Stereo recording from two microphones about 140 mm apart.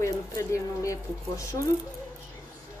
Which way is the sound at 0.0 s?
20° left (ahead or behind).